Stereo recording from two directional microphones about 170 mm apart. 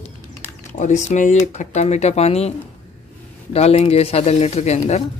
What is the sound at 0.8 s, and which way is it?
Speech, 45° left (ahead or behind).